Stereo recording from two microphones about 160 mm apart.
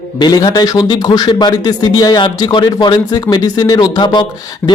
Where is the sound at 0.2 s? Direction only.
25° left (ahead or behind).